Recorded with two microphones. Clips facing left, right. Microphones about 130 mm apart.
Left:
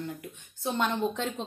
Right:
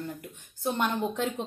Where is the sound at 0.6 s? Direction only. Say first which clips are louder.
Even; 10° right (ahead or behind).